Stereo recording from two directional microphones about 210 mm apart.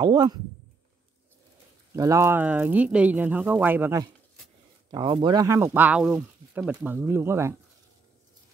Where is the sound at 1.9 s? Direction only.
15° right (ahead or behind).